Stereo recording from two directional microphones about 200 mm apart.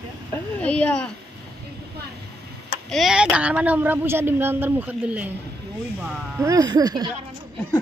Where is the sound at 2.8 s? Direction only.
Centre (ahead or behind).